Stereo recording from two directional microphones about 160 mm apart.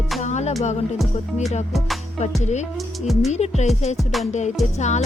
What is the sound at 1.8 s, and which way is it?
Music, centre (ahead or behind).